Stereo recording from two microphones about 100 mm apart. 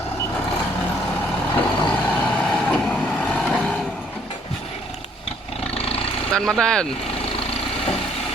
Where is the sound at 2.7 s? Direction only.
10° left (ahead or behind).